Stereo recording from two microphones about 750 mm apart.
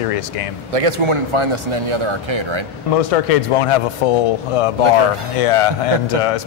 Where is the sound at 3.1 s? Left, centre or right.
Left.